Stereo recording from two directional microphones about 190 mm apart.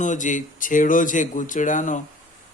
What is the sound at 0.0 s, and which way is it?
Speech, 40° left (ahead or behind).